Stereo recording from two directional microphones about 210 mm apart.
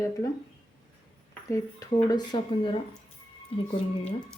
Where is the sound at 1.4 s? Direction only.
15° left (ahead or behind).